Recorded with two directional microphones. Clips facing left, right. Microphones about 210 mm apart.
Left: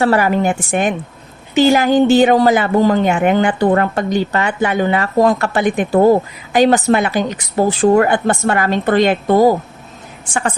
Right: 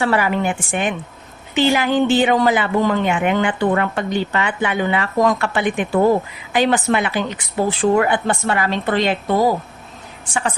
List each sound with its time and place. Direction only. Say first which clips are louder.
0.0 s speech: left 4 dB; 40° left (ahead or behind)